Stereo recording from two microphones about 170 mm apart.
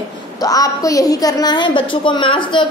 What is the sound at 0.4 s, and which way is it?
A woman's voice, 20° left (ahead or behind).